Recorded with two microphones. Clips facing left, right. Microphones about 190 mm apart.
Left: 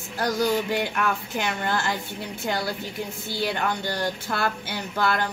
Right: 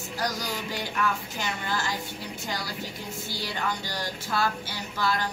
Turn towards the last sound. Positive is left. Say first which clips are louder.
# left 4 dB
turn(degrees=60)  # may be behind; listen again after turning